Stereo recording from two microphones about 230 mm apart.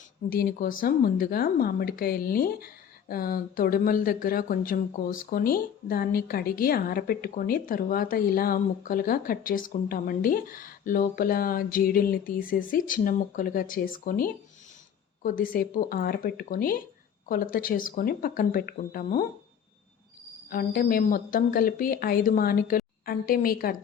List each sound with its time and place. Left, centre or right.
0.3 s a woman's voice: left
20.5 s a woman's voice: left